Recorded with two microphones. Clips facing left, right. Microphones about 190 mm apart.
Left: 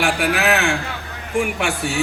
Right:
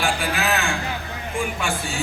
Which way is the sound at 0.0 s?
70° left (ahead or behind).